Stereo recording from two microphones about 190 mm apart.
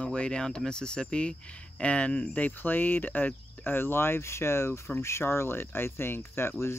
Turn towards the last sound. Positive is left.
turn(degrees=15)  # may be behind; listen again after turning